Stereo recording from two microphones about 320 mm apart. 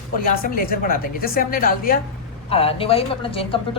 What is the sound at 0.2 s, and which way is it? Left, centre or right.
A woman's voice, left.